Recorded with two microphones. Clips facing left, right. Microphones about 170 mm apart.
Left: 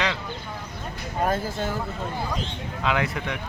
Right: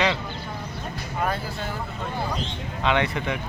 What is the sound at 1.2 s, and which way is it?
Speech, 45° left (ahead or behind).